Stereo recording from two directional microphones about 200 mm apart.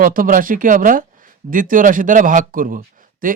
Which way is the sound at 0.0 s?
45° right (ahead or behind).